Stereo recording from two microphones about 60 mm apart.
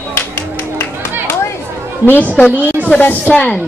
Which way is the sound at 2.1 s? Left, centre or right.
Left.